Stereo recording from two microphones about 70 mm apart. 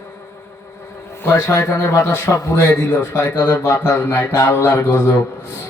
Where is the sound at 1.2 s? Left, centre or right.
Left.